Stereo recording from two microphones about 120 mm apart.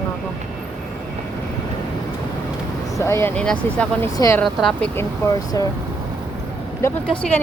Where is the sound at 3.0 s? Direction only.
20° left (ahead or behind).